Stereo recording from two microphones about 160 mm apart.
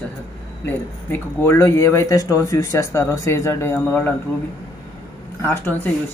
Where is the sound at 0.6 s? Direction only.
15° left (ahead or behind).